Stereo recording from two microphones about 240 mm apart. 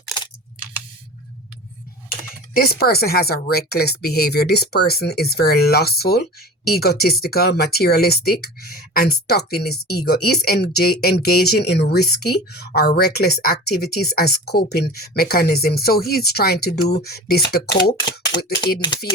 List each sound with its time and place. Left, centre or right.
2.6 s speech: left